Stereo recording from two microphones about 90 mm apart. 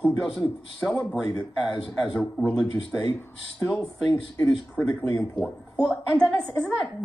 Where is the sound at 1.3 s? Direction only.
45° left (ahead or behind).